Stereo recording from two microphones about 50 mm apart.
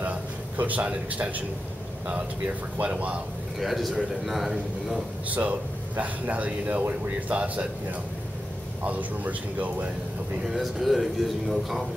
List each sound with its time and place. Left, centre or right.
0.6 s speech: right
3.5 s a man's voice: centre
5.3 s speech: right
8.8 s speech: right
10.5 s a man's voice: centre